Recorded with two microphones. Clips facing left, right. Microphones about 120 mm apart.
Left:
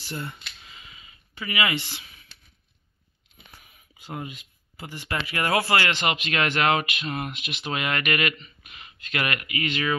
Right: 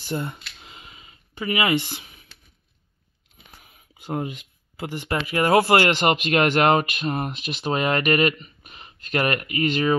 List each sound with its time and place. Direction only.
0.3 s a sound: 55° right (ahead or behind)
4.1 s speech: 50° right (ahead or behind)
4.7 s speech: 70° right (ahead or behind)
5.1 s speech: 35° right (ahead or behind)